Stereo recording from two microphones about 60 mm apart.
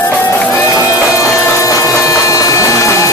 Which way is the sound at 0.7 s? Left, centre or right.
Left.